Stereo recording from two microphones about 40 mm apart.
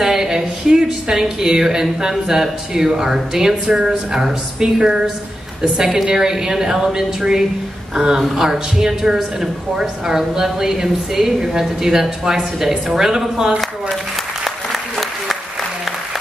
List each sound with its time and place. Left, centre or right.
0.0 s speech: centre
14.4 s applause: centre